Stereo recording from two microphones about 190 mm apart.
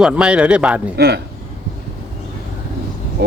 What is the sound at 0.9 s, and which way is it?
Speech, 60° right (ahead or behind).